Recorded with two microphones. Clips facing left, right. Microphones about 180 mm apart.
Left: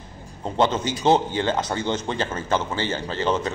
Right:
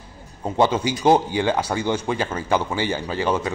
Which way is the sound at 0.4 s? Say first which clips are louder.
Right 2 dB; 10° right (ahead or behind).